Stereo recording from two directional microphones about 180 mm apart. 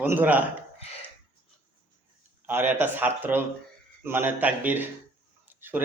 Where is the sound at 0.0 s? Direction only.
10° right (ahead or behind).